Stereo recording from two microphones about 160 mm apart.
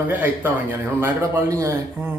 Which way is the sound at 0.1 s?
10° right (ahead or behind).